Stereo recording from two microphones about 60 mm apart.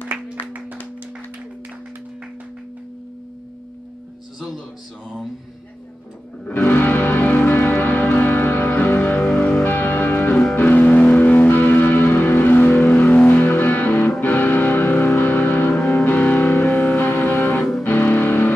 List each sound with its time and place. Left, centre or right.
0.1 s music: right
6.4 s music: left
9.3 s music: centre
9.6 s music: left